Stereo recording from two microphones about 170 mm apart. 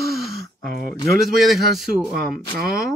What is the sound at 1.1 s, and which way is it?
A man's voice, centre (ahead or behind).